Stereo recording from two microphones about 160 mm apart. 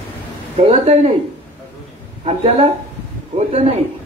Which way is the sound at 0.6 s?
35° right (ahead or behind).